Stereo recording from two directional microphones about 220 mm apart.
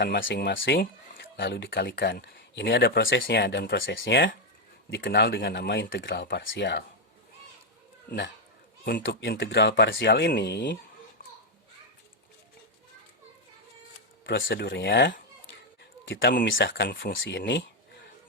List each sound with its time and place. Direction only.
0.0 s speech: 45° left (ahead or behind)
8.8 s a man's voice: 40° left (ahead or behind)
14.3 s speech: 45° left (ahead or behind)
16.3 s speech: 55° left (ahead or behind)